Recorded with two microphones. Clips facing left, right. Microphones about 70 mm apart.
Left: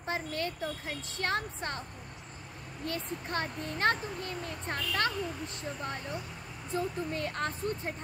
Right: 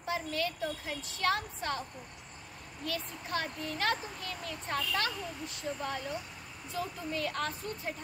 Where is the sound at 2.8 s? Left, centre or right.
Left.